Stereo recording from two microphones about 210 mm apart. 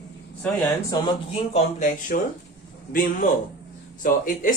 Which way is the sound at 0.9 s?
20° left (ahead or behind).